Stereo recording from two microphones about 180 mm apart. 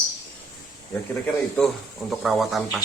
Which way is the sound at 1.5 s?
Centre (ahead or behind).